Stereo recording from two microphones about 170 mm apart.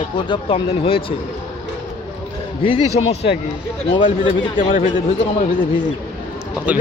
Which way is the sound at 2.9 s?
40° left (ahead or behind).